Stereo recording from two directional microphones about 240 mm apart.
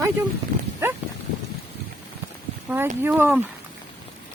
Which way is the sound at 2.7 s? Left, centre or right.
Centre.